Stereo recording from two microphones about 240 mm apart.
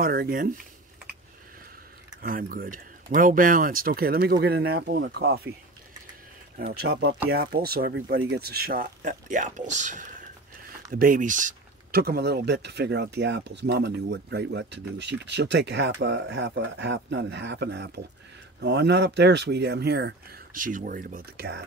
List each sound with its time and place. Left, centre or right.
0.0 s speech: right
2.2 s speech: right
6.8 s speech: right